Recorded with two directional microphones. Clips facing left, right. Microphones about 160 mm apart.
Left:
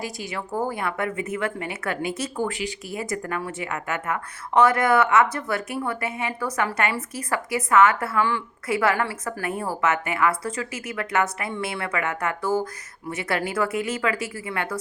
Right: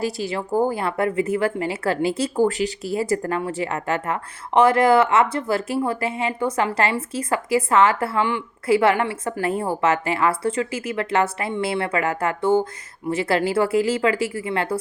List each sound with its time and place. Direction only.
0.3 s a woman's voice: 30° right (ahead or behind)